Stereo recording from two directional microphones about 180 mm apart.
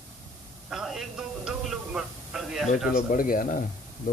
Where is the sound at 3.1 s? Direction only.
50° left (ahead or behind).